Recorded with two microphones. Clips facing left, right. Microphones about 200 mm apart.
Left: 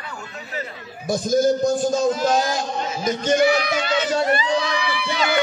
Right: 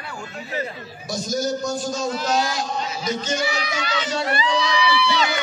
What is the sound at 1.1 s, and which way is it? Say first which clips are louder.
A man's voice: left 6 dB; 55° left (ahead or behind).